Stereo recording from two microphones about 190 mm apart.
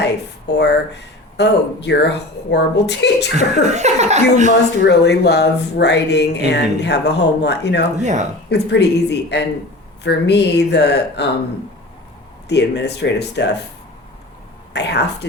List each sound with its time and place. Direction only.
0.6 s speech: 65° left (ahead or behind)
3.3 s speech: 35° right (ahead or behind)
4.8 s speech: 65° left (ahead or behind)
12.5 s speech: 65° left (ahead or behind)
14.7 s speech: 65° left (ahead or behind)